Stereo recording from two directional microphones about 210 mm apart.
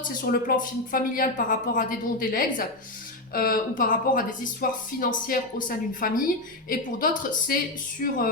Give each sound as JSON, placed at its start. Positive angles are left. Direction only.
{"t": 0.3, "sound": "speech", "side_deg": 40}